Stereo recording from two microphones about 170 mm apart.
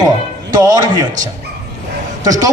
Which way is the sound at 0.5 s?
20° right (ahead or behind).